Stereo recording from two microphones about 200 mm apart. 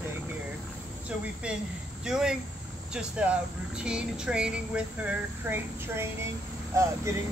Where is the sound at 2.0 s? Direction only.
5° right (ahead or behind).